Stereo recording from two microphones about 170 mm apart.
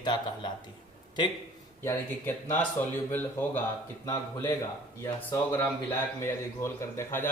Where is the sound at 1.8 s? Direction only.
15° left (ahead or behind).